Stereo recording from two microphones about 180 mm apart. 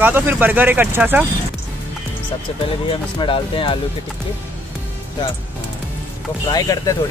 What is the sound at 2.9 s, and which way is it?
Speech, 30° left (ahead or behind).